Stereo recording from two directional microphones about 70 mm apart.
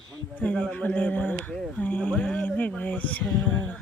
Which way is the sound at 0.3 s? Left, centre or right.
Centre.